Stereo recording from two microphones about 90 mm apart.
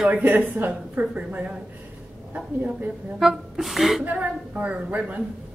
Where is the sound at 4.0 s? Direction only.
20° right (ahead or behind).